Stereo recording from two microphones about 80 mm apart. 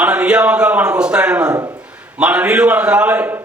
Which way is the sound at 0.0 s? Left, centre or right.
Centre.